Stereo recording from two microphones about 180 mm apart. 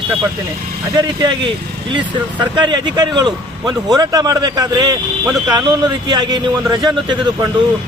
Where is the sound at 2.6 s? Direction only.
25° right (ahead or behind).